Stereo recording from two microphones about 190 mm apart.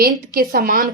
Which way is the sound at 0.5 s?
45° right (ahead or behind).